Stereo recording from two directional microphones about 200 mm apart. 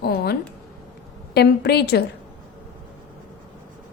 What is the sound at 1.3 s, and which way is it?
Speech, 55° left (ahead or behind).